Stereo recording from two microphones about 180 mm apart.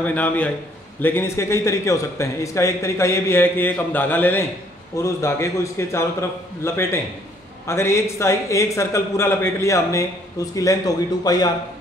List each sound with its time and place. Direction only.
0.0 s a man's voice: 10° left (ahead or behind)